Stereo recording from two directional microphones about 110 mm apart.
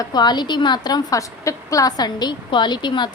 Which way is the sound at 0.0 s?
40° left (ahead or behind).